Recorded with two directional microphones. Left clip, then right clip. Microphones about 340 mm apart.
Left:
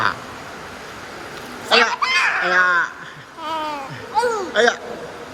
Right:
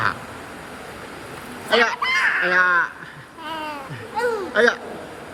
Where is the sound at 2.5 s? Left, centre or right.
Centre.